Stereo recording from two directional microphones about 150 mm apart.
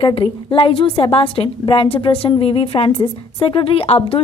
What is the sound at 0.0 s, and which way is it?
A woman's voice, 40° left (ahead or behind).